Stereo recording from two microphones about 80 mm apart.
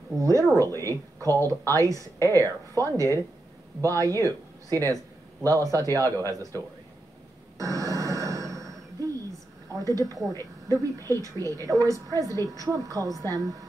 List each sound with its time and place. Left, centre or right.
0.2 s a woman's voice: right
7.5 s a sound: right
9.7 s speech: right